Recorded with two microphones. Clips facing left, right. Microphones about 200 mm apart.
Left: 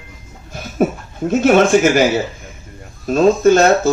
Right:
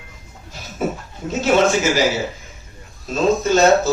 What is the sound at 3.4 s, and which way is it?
Speech, 55° left (ahead or behind).